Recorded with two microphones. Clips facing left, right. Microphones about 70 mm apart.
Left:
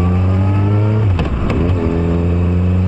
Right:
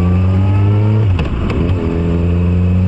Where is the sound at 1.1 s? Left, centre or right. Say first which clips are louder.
Even; left.